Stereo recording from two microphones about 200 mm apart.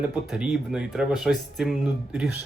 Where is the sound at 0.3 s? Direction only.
5° right (ahead or behind).